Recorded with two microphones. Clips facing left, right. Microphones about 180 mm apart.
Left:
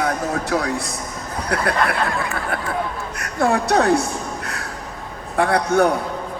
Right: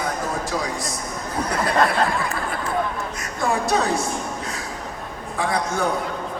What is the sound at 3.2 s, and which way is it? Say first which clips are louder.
Speech: left 5 dB; 60° left (ahead or behind).